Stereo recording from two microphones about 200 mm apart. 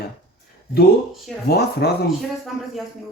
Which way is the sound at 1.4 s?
55° left (ahead or behind).